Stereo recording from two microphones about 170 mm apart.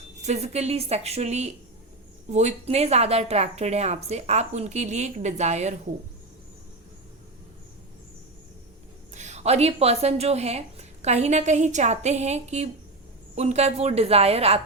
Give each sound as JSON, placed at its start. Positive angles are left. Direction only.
{"t": 0.2, "sound": "a woman's voice", "side_deg": -40}
{"t": 9.1, "sound": "a woman's voice", "side_deg": -40}